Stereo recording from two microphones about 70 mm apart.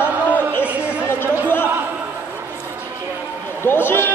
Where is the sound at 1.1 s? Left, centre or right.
Left.